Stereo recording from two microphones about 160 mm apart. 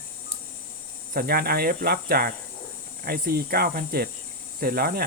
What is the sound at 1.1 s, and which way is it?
Speech, 70° right (ahead or behind).